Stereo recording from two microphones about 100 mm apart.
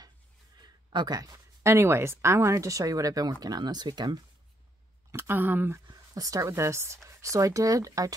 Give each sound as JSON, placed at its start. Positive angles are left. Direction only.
{"t": 0.6, "sound": "a woman's voice", "side_deg": -45}
{"t": 5.1, "sound": "a woman's voice", "side_deg": -25}